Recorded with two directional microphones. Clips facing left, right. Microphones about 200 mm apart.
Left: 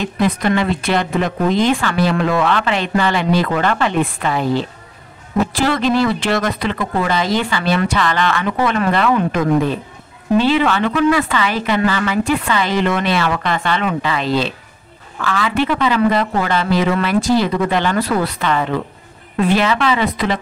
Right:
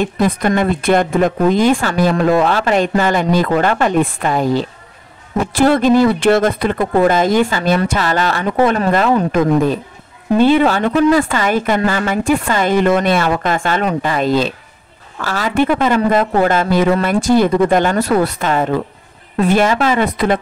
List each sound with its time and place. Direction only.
0.0 s speech: 50° right (ahead or behind)
10.6 s speech: 40° right (ahead or behind)